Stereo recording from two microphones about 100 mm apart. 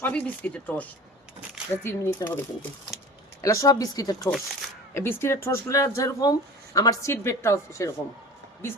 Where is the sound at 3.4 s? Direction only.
35° left (ahead or behind).